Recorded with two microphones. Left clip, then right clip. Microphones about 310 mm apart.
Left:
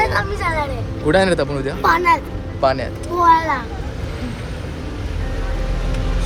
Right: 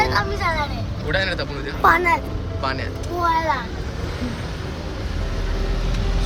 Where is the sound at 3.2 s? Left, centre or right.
Left.